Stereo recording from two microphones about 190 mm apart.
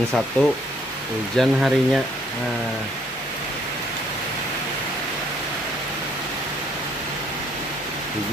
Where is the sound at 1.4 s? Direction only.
Centre (ahead or behind).